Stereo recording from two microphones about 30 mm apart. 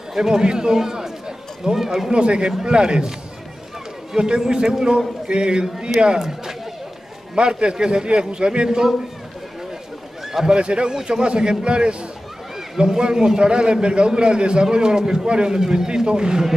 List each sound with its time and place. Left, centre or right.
0.1 s a man's voice: centre
2.0 s a man's voice: right
6.1 s speech: centre
7.3 s a man's voice: right
10.5 s a man's voice: right
12.7 s a man's voice: right